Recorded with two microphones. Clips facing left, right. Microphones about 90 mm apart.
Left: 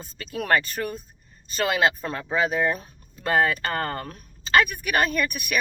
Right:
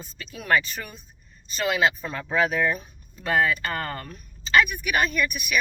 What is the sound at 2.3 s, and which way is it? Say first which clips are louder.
Speech: even; 25° left (ahead or behind).